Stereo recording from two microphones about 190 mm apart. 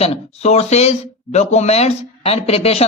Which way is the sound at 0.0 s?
35° left (ahead or behind).